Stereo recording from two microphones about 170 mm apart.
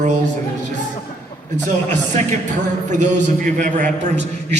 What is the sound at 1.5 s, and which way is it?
A man's voice, 45° right (ahead or behind).